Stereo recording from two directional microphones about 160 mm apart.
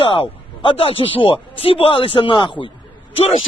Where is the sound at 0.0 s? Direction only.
30° left (ahead or behind).